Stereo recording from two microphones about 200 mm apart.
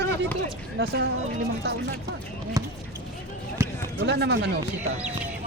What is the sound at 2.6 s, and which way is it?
Basketball bounce, 15° right (ahead or behind).